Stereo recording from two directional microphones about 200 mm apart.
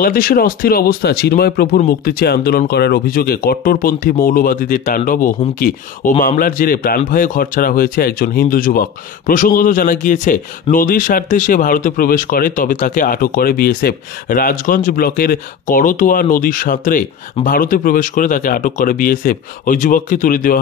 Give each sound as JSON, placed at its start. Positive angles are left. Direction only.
{"t": 0.0, "sound": "speech", "side_deg": 45}